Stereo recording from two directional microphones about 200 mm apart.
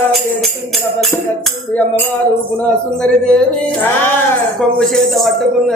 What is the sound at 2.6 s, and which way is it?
Speech, 5° left (ahead or behind).